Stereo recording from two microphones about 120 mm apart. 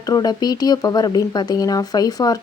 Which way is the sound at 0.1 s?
30° left (ahead or behind).